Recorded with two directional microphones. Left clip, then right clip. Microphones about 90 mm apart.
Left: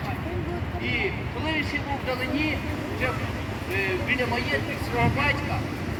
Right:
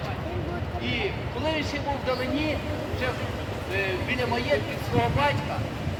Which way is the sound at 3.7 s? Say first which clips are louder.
Left 2 dB; 15° right (ahead or behind).